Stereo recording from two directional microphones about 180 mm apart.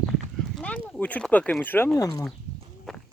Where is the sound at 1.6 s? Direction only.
10° left (ahead or behind).